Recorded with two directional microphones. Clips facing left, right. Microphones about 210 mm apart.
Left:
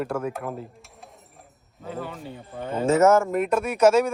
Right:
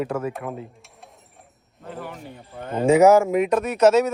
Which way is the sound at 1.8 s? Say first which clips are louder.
Left 2 dB; centre (ahead or behind).